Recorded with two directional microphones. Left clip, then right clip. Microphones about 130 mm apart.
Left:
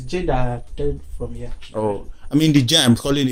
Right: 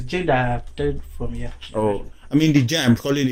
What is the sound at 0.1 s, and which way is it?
Speech, 40° right (ahead or behind).